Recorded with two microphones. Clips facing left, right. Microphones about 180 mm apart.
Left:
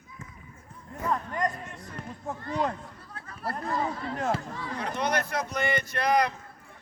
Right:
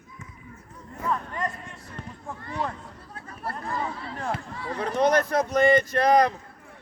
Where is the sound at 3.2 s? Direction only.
25° right (ahead or behind).